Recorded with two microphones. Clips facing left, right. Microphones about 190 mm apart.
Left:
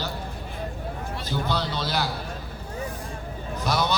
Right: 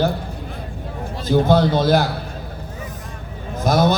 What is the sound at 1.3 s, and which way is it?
Speech, 50° right (ahead or behind).